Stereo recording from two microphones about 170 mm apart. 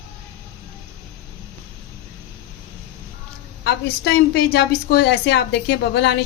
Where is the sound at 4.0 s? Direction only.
75° left (ahead or behind).